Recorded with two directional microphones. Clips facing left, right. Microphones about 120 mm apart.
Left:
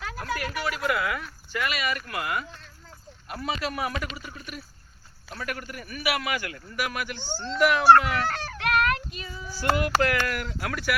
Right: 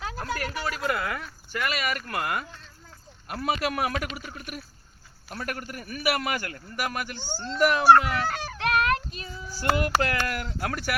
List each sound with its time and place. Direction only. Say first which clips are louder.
0.0 s a sound: even; 25° right (ahead or behind)
0.5 s a man's voice: left 3 dB; 35° right (ahead or behind)
3.2 s a man's voice: right 3 dB; 55° right (ahead or behind)
5.4 s a man's voice: even; 40° right (ahead or behind)
7.2 s a child's voice: even; 5° right (ahead or behind)
8.5 s child singing: even; 40° right (ahead or behind)
10.2 s a man's voice: even; 40° right (ahead or behind)